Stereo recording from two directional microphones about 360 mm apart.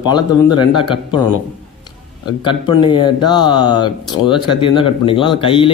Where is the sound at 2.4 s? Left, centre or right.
Centre.